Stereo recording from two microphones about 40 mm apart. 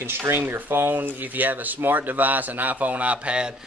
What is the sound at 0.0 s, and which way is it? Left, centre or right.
Speech, right.